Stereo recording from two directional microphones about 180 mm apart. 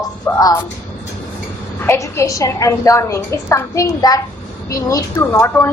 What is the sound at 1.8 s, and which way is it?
A woman's voice, 15° left (ahead or behind).